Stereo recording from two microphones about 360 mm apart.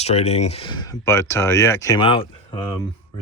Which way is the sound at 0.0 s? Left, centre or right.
Centre.